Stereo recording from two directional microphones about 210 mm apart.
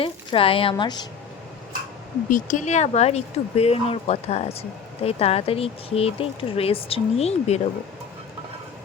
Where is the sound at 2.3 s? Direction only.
35° left (ahead or behind).